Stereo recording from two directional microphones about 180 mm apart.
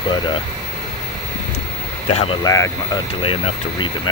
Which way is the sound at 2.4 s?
15° left (ahead or behind).